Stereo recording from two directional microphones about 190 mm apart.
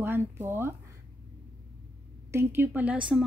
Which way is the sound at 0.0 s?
15° right (ahead or behind).